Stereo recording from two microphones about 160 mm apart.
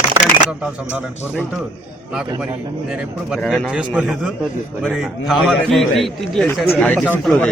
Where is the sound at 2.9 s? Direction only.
5° right (ahead or behind).